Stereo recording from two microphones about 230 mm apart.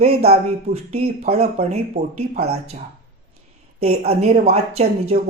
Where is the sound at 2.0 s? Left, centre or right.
Right.